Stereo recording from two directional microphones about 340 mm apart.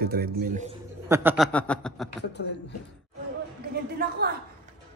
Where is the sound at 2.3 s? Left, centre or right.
Left.